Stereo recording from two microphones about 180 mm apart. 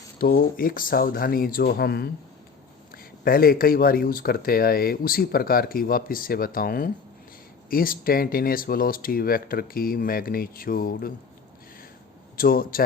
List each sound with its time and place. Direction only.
0.2 s speech: 55° left (ahead or behind)
12.4 s speech: 55° left (ahead or behind)